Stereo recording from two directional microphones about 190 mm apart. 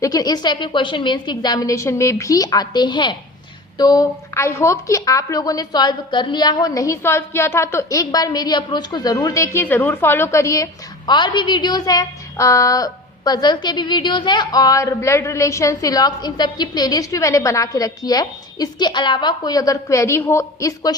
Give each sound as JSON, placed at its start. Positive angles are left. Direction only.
{"t": 0.0, "sound": "a woman's voice", "side_deg": 20}